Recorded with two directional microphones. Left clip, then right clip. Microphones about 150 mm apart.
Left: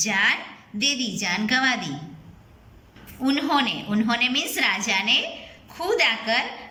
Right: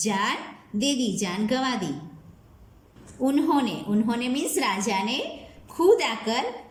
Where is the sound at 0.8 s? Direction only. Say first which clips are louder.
Left 2 dB; 75° left (ahead or behind).